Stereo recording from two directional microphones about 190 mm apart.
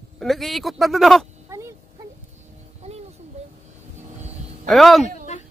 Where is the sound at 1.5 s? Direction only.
15° right (ahead or behind).